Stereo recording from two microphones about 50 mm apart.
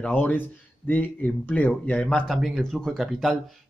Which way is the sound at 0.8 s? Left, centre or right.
Left.